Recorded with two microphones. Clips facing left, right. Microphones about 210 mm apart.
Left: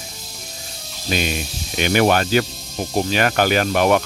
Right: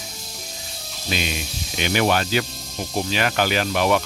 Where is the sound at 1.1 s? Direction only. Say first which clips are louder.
Left 4 dB; 45° left (ahead or behind).